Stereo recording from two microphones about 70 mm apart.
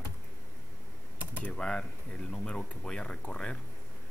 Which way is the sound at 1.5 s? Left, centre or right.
Centre.